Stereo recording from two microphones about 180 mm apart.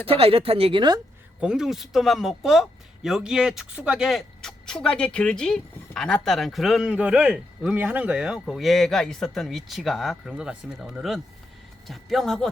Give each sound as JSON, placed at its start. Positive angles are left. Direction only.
{"t": 0.1, "sound": "speech", "side_deg": -30}
{"t": 1.4, "sound": "speech", "side_deg": -5}